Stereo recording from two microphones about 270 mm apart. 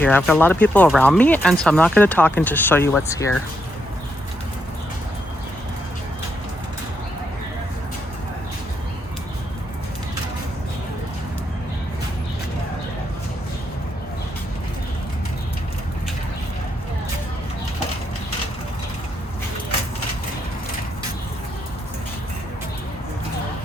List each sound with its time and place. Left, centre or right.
0.0 s speech: centre